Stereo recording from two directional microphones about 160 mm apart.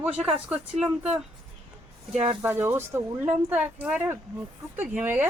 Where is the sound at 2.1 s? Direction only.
40° right (ahead or behind).